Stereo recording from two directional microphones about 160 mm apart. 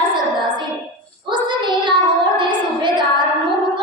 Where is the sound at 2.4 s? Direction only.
30° right (ahead or behind).